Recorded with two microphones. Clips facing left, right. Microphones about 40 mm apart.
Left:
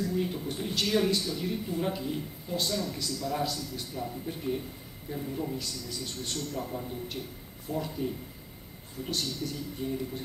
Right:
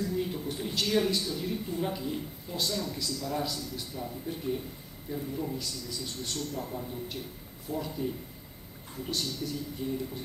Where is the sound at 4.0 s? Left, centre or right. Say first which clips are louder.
Left 1 dB; centre.